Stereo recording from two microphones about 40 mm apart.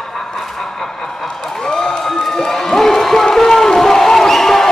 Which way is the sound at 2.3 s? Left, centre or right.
Centre.